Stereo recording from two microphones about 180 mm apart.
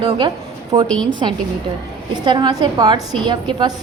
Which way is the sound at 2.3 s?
25° right (ahead or behind).